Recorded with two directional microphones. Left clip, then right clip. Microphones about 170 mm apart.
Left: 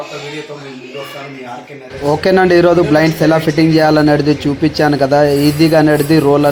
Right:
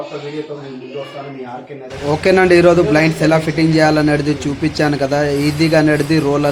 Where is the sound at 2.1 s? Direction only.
20° left (ahead or behind).